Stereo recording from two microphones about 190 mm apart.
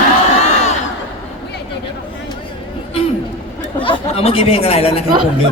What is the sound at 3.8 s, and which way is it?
Speech, 30° left (ahead or behind).